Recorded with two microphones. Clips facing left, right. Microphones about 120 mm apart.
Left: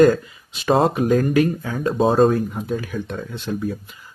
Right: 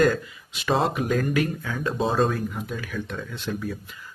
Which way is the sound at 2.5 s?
30° left (ahead or behind).